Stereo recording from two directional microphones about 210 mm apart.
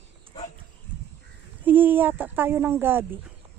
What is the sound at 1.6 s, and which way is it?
Speech, 10° right (ahead or behind).